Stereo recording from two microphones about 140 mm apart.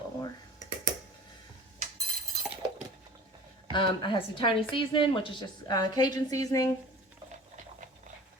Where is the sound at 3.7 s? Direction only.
35° left (ahead or behind).